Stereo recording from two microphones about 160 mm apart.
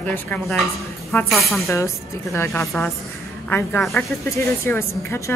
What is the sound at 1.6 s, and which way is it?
A woman's voice, 20° left (ahead or behind).